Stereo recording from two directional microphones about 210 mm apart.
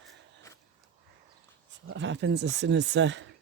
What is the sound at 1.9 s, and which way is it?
Speech, 60° right (ahead or behind).